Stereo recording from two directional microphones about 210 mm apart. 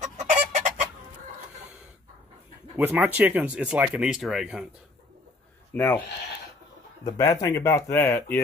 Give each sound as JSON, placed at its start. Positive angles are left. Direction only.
{"t": 0.0, "sound": "chicken", "side_deg": -35}
{"t": 2.8, "sound": "speech", "side_deg": -5}
{"t": 5.8, "sound": "speech", "side_deg": 10}
{"t": 7.2, "sound": "speech", "side_deg": 15}